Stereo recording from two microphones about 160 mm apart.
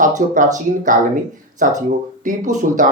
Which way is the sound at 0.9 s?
55° right (ahead or behind).